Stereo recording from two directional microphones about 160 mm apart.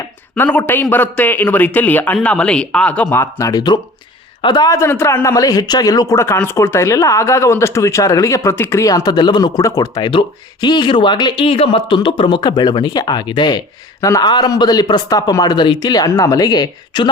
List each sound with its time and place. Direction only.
0.3 s a man's voice: 10° left (ahead or behind); by 17.1 s 25° left (ahead or behind)